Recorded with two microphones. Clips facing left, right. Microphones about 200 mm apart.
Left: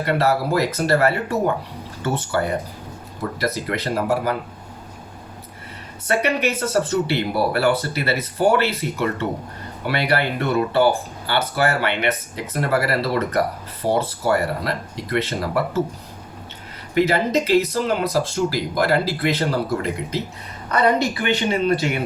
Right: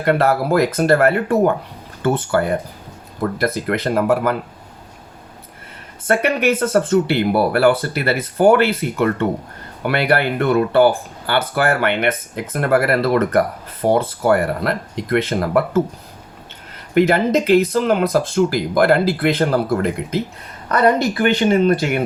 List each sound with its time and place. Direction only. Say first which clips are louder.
0.0 s speech: right 3 dB; 55° right (ahead or behind)
6.1 s speech: right 4 dB; 55° right (ahead or behind)
16.9 s speech: right 4 dB; 55° right (ahead or behind)